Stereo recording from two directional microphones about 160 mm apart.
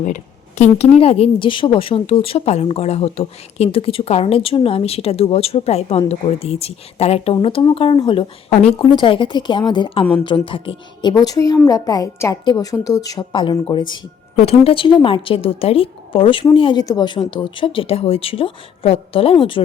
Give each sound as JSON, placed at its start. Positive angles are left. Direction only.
{"t": 0.0, "sound": "speech", "side_deg": 50}
{"t": 11.1, "sound": "a woman's voice", "side_deg": 20}